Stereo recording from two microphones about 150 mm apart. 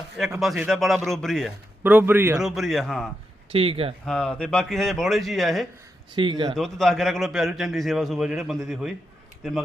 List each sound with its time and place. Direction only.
0.3 s a man's voice: centre (ahead or behind)
1.8 s speech: 10° right (ahead or behind)
2.4 s a man's voice: centre (ahead or behind)
3.5 s speech: 40° right (ahead or behind)
4.0 s a man's voice: 5° left (ahead or behind)
6.1 s speech: 35° right (ahead or behind)
6.5 s a man's voice: 5° left (ahead or behind)